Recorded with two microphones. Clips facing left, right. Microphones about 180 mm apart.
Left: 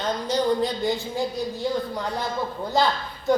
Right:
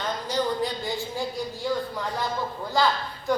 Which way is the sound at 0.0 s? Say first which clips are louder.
Left 3 dB; 20° left (ahead or behind).